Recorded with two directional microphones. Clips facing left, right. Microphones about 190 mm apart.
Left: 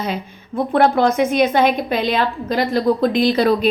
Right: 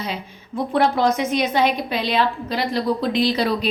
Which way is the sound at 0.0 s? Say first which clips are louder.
Left 5 dB; 55° left (ahead or behind).